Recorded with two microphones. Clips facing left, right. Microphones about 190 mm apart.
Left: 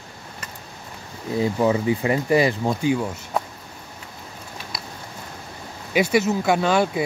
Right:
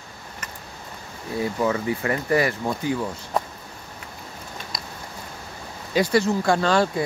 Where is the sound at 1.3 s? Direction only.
20° left (ahead or behind).